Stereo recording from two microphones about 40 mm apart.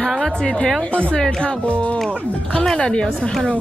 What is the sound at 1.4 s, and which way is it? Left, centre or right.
Speech, left.